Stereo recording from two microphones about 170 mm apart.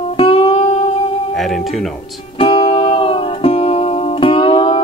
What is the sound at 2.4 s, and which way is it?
Music, 30° left (ahead or behind).